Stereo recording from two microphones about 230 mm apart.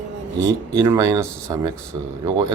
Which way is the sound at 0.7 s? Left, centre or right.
Centre.